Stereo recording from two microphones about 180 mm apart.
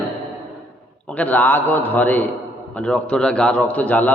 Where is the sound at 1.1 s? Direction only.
10° left (ahead or behind).